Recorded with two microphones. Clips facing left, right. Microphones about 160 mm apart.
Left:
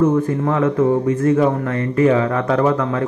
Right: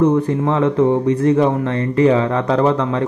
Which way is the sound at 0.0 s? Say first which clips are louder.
Right 1 dB; 20° right (ahead or behind).